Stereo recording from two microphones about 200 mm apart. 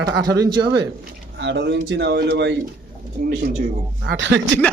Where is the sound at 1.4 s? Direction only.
60° right (ahead or behind).